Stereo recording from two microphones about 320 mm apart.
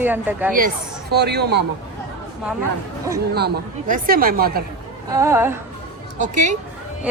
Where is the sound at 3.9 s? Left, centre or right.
Right.